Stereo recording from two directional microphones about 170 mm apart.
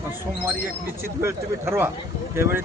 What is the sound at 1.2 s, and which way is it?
A man's voice, 15° right (ahead or behind).